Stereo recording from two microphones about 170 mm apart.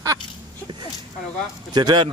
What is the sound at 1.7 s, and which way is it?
Speech, 25° right (ahead or behind).